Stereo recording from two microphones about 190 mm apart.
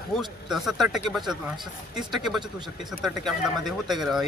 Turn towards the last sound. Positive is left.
turn(degrees=0)  # may be behind; listen again after turning